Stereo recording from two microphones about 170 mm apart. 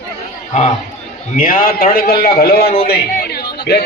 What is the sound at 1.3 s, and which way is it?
A man's voice, 55° left (ahead or behind).